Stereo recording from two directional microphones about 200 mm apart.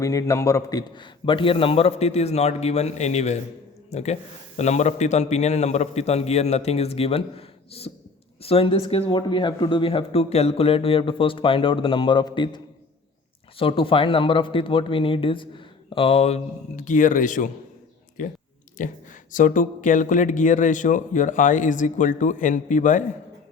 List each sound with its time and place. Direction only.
0.0 s speech: 15° left (ahead or behind); by 23.0 s 40° left (ahead or behind)